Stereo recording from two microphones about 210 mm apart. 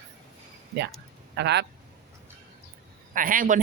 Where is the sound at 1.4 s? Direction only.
55° right (ahead or behind).